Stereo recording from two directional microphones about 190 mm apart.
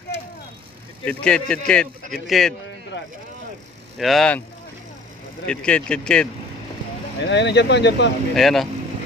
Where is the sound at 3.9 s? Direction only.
Centre (ahead or behind).